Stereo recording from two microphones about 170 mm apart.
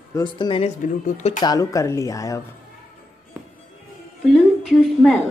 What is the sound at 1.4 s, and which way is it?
Speech, 20° left (ahead or behind).